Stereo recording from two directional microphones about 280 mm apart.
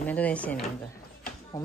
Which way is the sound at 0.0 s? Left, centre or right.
Centre.